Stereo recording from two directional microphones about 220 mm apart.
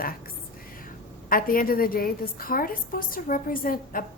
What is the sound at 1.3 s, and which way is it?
A woman's voice, 40° left (ahead or behind).